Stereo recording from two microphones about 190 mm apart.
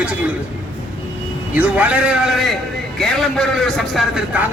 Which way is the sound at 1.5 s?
10° right (ahead or behind).